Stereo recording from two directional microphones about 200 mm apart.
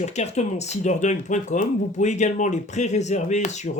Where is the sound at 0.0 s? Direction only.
35° left (ahead or behind).